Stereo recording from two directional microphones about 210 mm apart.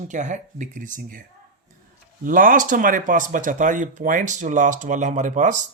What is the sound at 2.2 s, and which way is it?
A man's voice, 40° right (ahead or behind).